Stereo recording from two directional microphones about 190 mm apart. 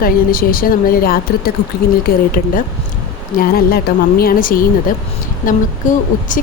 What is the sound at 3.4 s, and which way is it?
A woman's voice, 50° left (ahead or behind).